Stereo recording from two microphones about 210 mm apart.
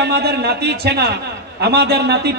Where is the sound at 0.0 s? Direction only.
50° right (ahead or behind).